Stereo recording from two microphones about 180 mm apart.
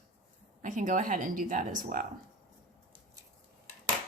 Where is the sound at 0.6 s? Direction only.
45° right (ahead or behind).